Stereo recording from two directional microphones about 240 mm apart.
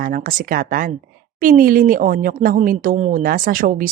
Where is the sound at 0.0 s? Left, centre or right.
Right.